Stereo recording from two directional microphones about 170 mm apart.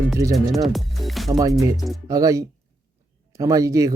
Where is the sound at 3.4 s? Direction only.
20° right (ahead or behind).